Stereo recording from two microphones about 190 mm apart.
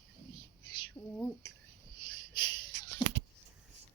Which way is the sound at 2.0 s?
25° left (ahead or behind).